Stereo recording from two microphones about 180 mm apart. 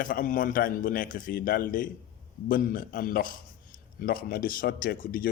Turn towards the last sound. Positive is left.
turn(degrees=55)  # may be behind; listen again after turning